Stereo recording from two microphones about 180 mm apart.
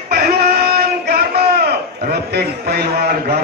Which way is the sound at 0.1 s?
60° right (ahead or behind).